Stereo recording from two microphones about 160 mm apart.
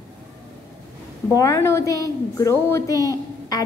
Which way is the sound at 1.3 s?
20° left (ahead or behind).